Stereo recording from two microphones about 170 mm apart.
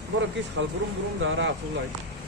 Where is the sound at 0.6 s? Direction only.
90° right.